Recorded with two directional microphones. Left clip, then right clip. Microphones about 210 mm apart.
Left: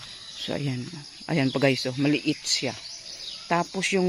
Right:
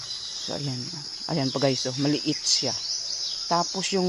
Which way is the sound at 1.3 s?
15° left (ahead or behind).